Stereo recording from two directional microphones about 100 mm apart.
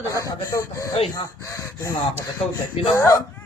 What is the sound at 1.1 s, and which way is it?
Chicken, 30° left (ahead or behind).